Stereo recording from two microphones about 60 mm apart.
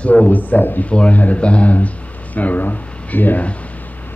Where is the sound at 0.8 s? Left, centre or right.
Left.